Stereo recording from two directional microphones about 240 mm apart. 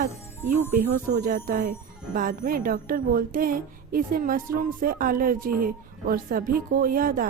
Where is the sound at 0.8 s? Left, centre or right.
Right.